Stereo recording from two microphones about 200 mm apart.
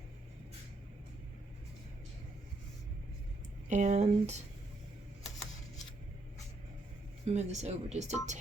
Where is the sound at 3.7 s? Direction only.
35° right (ahead or behind).